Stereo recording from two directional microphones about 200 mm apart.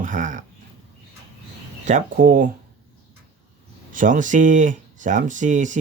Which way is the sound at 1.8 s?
40° right (ahead or behind).